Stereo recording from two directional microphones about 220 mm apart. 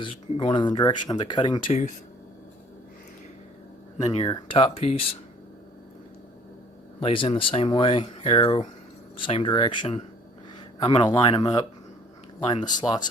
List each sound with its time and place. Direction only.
0.0 s speech: 25° left (ahead or behind)
4.0 s speech: 20° left (ahead or behind)
7.0 s speech: 25° left (ahead or behind)